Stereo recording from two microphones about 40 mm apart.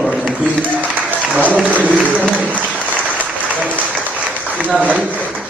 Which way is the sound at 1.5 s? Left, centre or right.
Right.